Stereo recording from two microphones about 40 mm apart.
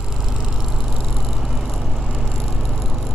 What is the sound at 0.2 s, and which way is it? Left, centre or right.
Vehicle, centre.